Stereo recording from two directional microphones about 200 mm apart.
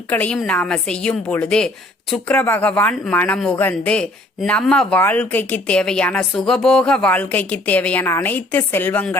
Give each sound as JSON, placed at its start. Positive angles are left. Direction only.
{"t": 0.1, "sound": "a woman's voice", "side_deg": 10}